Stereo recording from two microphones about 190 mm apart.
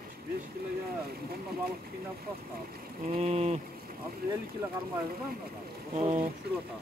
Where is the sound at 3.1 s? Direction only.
35° right (ahead or behind).